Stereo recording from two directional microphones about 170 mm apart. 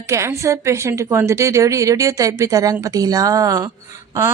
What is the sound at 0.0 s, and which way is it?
A woman's voice, 15° right (ahead or behind).